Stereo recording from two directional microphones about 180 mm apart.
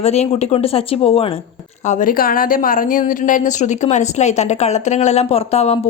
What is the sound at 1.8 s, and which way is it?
A woman's voice, 45° left (ahead or behind).